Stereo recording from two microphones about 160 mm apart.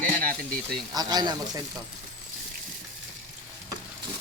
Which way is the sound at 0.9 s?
25° right (ahead or behind).